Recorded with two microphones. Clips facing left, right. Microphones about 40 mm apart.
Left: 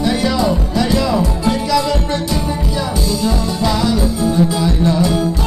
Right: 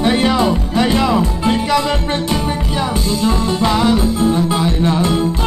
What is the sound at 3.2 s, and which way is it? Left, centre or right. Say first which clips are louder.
Music: right 4 dB; right.